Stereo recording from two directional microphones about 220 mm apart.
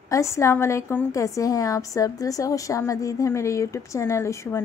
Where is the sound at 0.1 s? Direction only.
15° left (ahead or behind).